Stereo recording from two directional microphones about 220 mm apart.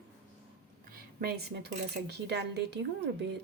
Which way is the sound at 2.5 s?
50° right (ahead or behind).